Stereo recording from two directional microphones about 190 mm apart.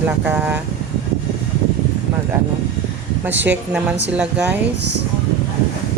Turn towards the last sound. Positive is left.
turn(degrees=-5)  # may be behind; listen again after turning